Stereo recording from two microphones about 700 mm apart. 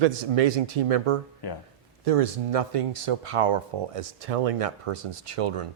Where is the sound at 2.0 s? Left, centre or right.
Right.